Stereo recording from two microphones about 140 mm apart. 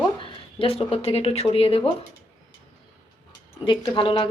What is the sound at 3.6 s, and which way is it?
Speech, 35° left (ahead or behind).